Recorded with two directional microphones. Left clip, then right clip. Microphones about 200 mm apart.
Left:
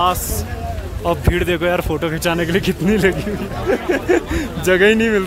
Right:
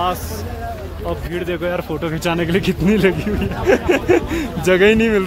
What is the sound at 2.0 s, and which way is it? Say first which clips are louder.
Speech: left 1 dB; 10° left (ahead or behind).